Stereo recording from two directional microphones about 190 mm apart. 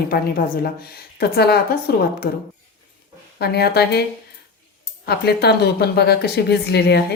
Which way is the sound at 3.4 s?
55° left (ahead or behind).